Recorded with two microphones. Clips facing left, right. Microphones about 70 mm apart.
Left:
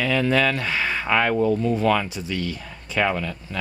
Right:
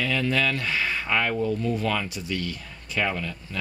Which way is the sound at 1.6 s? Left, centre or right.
Left.